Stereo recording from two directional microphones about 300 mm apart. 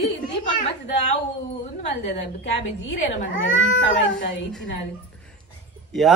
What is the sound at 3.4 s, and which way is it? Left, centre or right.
Speech, left.